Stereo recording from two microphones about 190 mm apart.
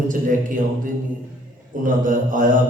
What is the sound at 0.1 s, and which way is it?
Speech, 45° right (ahead or behind).